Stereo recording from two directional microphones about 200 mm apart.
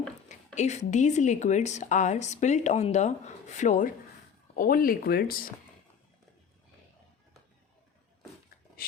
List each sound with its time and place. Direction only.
0.3 s a woman's voice: 35° left (ahead or behind)